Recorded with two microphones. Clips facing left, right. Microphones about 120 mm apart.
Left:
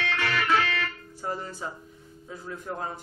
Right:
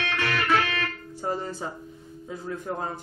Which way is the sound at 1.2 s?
30° right (ahead or behind).